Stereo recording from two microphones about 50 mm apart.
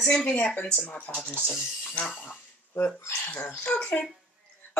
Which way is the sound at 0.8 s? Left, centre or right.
Left.